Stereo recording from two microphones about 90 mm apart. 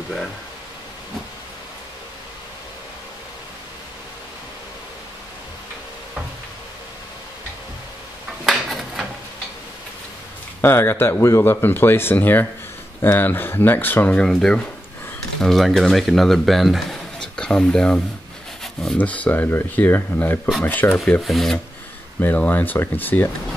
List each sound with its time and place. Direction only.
8.5 s a sound: centre (ahead or behind)
10.6 s speech: 25° left (ahead or behind)
14.2 s speech: 5° left (ahead or behind)
18.6 s a sound: 5° left (ahead or behind)
18.9 s speech: 15° left (ahead or behind)
21.2 s speech: centre (ahead or behind)
22.2 s speech: 20° left (ahead or behind)